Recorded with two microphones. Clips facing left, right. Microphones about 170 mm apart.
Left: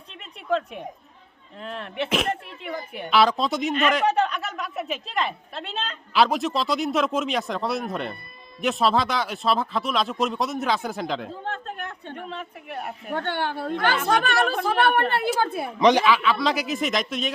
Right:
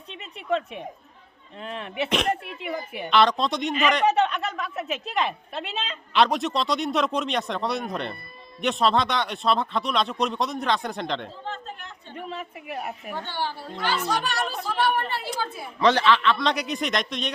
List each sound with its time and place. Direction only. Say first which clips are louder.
0.1 s a sound: left 1 dB; centre (ahead or behind)
1.6 s a woman's voice: even; centre (ahead or behind)
11.4 s a sound: left 4 dB; 60° left (ahead or behind)
12.1 s speech: even; 5° right (ahead or behind)
13.1 s a woman's voice: left 7 dB; 60° left (ahead or behind)
15.8 s a woman's voice: left 2 dB; 15° left (ahead or behind)